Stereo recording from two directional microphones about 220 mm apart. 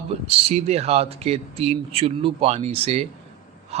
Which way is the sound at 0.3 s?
25° right (ahead or behind).